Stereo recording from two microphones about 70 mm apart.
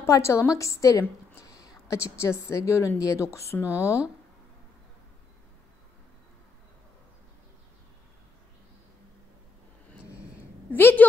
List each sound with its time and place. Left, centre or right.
0.1 s a woman's voice: left
1.4 s a sound: left
2.4 s a woman's voice: left
10.7 s a woman's voice: left